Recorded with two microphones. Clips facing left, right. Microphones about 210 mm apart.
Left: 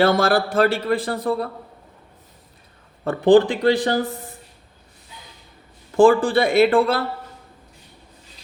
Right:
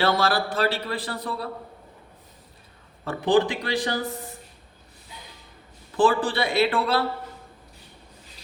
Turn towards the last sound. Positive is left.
turn(degrees=50)  # may be behind; listen again after turning